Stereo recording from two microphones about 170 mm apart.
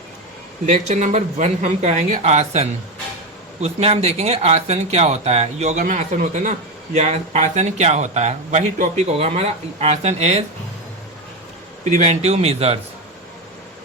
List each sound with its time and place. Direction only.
0.6 s speech: 45° right (ahead or behind)
11.9 s speech: 40° right (ahead or behind)